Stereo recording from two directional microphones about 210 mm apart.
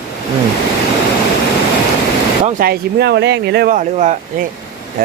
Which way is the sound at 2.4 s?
40° right (ahead or behind).